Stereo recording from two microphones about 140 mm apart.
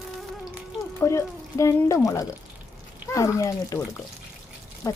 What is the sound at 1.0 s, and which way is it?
Speech, 20° left (ahead or behind).